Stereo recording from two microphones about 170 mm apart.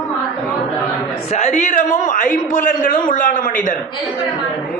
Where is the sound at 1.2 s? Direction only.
40° left (ahead or behind).